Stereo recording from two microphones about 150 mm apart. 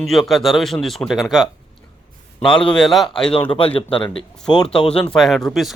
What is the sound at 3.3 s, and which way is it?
Speech, 30° left (ahead or behind).